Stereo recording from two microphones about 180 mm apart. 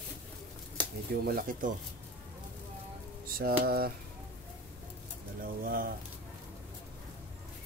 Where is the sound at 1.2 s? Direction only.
50° right (ahead or behind).